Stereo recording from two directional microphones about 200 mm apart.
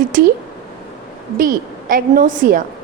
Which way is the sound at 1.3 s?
45° right (ahead or behind).